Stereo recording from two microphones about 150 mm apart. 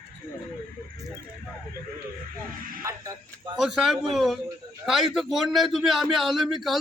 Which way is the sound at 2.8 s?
25° right (ahead or behind).